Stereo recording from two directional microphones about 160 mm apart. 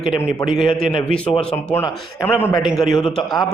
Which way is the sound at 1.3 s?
15° left (ahead or behind).